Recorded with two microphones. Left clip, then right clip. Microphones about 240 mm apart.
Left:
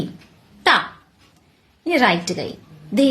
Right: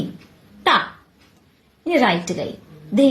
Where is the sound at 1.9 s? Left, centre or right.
Left.